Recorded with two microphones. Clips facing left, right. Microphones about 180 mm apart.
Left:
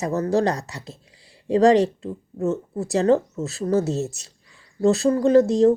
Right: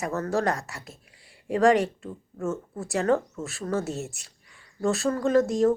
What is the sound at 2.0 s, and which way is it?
Speech, 20° left (ahead or behind).